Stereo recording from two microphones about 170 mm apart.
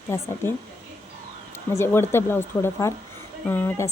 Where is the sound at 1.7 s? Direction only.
15° left (ahead or behind).